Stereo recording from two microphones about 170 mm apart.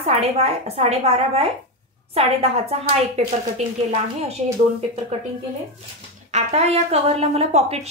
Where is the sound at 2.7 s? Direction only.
40° right (ahead or behind).